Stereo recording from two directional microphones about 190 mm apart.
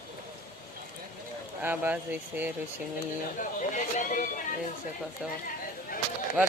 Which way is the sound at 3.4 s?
40° left (ahead or behind).